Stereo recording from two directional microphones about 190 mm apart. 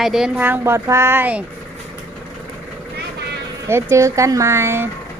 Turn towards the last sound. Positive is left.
turn(degrees=-10)  # may be behind; listen again after turning